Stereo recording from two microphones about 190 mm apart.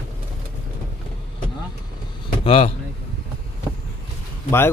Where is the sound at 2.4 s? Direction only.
30° left (ahead or behind).